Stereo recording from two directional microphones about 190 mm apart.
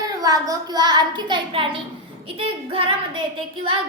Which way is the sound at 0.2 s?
20° right (ahead or behind).